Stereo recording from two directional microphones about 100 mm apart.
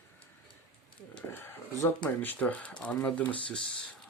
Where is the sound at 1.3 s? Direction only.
25° left (ahead or behind).